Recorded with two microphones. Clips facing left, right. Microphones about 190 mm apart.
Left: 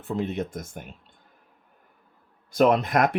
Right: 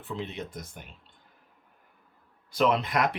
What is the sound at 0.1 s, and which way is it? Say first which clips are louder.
Speech: left 8 dB; 50° left (ahead or behind).